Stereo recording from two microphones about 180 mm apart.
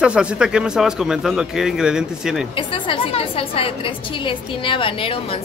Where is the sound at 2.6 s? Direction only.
30° left (ahead or behind).